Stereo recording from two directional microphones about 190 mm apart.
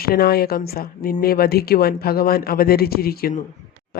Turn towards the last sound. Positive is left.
turn(degrees=55)  # may be behind; listen again after turning